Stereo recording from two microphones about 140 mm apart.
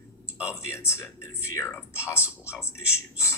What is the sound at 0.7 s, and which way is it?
Speech, 20° left (ahead or behind).